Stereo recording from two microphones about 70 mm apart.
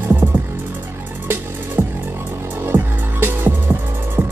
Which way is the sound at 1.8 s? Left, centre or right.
Right.